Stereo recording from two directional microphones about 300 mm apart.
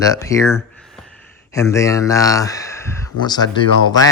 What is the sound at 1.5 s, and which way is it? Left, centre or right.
Speech, centre.